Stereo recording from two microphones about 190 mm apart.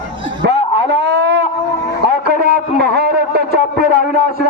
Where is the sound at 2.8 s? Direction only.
55° right (ahead or behind).